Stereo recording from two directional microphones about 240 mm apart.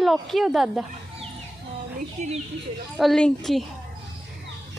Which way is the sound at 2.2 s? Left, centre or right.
Right.